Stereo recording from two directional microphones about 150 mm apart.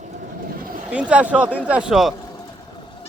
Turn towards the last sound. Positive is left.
turn(degrees=30)  # may be behind; listen again after turning